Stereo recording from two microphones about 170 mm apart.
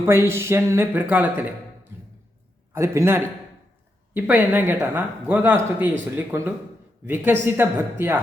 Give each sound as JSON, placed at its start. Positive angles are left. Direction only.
{"t": 0.0, "sound": "a man's voice", "side_deg": -15}
{"t": 2.7, "sound": "a man's voice", "side_deg": -15}